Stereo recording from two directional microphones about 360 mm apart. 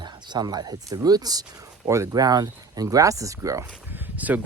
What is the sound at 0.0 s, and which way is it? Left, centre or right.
Speech, centre.